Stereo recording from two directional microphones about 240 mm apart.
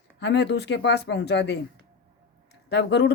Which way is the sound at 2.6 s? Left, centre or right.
Left.